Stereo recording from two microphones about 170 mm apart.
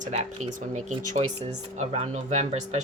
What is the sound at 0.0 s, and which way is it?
Speech, 40° right (ahead or behind).